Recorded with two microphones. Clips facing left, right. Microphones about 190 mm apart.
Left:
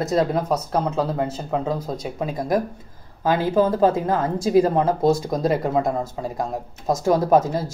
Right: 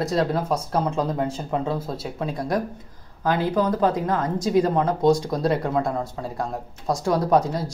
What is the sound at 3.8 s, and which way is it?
Speech, 25° left (ahead or behind).